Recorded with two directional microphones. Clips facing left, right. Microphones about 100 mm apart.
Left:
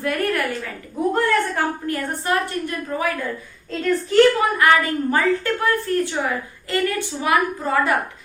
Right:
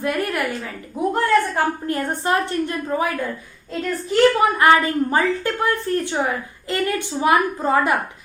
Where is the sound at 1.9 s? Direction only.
25° right (ahead or behind).